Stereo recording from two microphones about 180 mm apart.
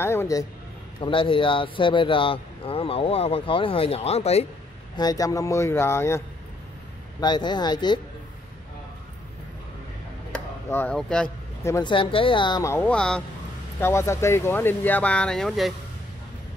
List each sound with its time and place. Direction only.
0.0 s speech: 15° left (ahead or behind)
1.0 s speech: 30° left (ahead or behind)
4.9 s speech: 20° left (ahead or behind)
10.7 s speech: 10° left (ahead or behind)
11.6 s speech: 15° left (ahead or behind)
11.9 s speech: 30° left (ahead or behind); by 15.7 s centre (ahead or behind)